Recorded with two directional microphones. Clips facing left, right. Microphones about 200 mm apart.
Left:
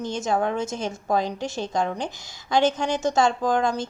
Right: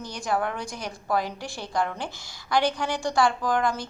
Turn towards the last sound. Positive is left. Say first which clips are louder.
# left 3 dB
turn(degrees=25)  # may be behind; listen again after turning